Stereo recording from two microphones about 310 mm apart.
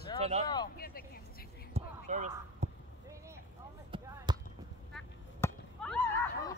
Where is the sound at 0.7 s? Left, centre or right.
Left.